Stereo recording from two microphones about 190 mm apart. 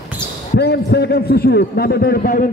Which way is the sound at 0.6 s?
60° left (ahead or behind).